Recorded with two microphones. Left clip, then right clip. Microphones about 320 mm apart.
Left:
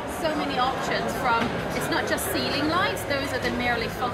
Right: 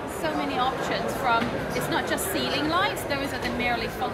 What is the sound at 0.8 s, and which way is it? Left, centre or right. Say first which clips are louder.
Speech: left 1 dB; centre.